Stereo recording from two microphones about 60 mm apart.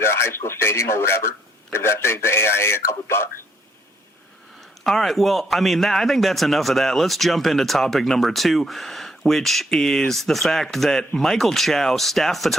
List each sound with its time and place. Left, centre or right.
0.0 s a man's voice: left
4.8 s a man's voice: centre